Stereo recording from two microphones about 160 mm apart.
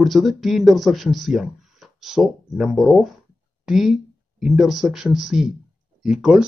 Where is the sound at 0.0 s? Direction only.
Centre (ahead or behind).